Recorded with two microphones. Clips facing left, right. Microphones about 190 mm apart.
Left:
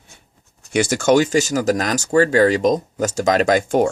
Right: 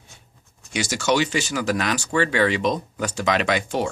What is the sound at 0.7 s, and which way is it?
Speech, 55° left (ahead or behind).